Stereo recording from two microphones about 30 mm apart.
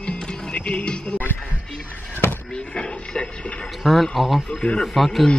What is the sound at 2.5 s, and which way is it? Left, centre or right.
Speech, left.